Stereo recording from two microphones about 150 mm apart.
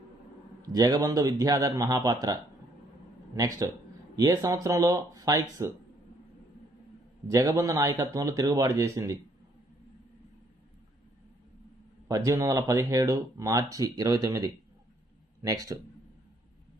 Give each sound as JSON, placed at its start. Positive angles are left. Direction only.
{"t": 0.6, "sound": "speech", "side_deg": -25}
{"t": 7.3, "sound": "speech", "side_deg": -20}
{"t": 12.0, "sound": "speech", "side_deg": -20}